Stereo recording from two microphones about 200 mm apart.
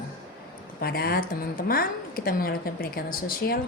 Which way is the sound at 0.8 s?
50° left (ahead or behind).